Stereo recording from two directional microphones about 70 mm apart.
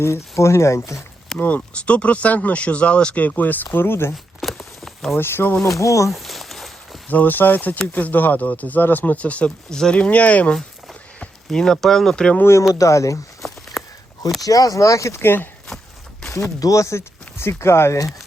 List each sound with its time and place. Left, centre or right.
0.0 s speech: left
1.4 s speech: left
4.4 s a sound: centre
5.1 s speech: left
5.6 s speech: left
6.1 s a sound: centre
7.1 s speech: left
11.4 s speech: centre
12.8 s speech: left
13.8 s a sound: centre
14.4 s speech: left
15.2 s speech: left
16.6 s speech: left